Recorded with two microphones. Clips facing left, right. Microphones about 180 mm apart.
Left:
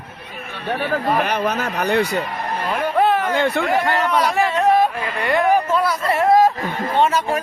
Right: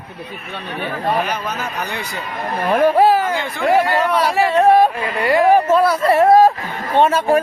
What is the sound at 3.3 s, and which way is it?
Speech, 65° left (ahead or behind).